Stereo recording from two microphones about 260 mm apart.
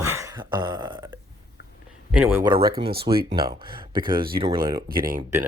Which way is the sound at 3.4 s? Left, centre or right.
Centre.